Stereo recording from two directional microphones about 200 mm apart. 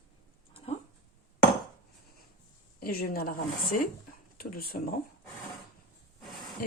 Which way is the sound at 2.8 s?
50° left (ahead or behind).